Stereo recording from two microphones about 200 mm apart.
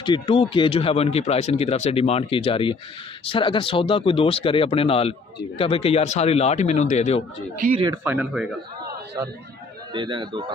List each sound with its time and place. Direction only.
0.0 s a man's voice: 25° left (ahead or behind)
7.9 s speech: 10° right (ahead or behind)
9.9 s a man's voice: 25° right (ahead or behind)